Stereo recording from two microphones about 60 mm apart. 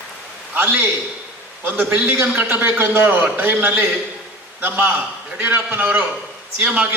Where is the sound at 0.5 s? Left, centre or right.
Right.